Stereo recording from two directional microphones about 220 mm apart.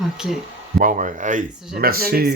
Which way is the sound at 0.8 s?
35° right (ahead or behind).